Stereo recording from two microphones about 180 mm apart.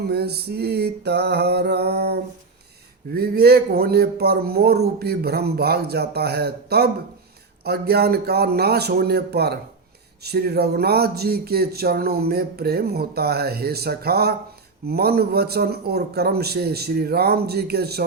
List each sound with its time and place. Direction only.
0.0 s a man's voice: 65° right (ahead or behind)